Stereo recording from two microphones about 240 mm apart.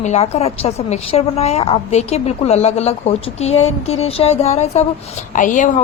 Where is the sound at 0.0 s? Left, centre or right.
Left.